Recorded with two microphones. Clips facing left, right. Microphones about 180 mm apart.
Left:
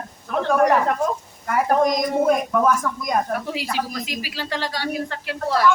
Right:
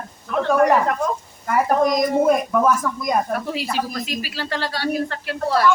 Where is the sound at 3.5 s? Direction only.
15° left (ahead or behind).